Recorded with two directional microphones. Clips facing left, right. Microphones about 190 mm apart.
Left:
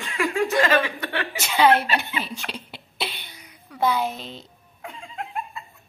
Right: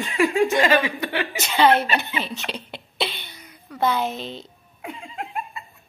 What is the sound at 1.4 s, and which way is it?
Speech, 10° left (ahead or behind).